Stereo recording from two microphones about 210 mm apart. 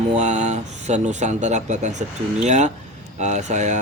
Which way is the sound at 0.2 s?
35° right (ahead or behind).